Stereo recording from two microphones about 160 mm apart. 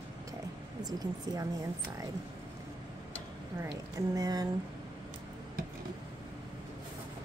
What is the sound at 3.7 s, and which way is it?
Speech, 25° right (ahead or behind).